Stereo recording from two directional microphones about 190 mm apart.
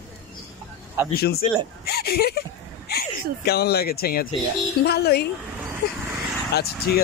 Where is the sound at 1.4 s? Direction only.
35° left (ahead or behind).